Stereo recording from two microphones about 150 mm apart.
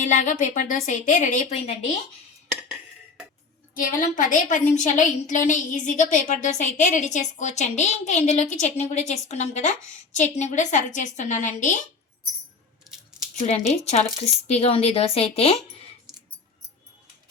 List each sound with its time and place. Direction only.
0.0 s a woman's voice: 60° left (ahead or behind)
3.8 s a woman's voice: 65° left (ahead or behind)
12.9 s scissors: centre (ahead or behind)
13.4 s a woman's voice: 45° left (ahead or behind)